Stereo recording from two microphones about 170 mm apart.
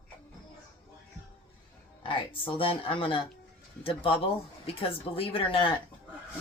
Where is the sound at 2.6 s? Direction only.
35° left (ahead or behind).